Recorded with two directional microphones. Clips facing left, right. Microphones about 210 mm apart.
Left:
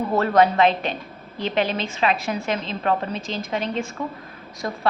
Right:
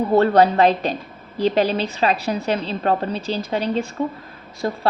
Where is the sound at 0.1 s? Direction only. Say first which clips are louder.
Right 3 dB; 30° right (ahead or behind).